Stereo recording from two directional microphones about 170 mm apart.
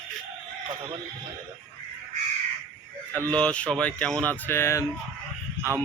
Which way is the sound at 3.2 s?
5° left (ahead or behind).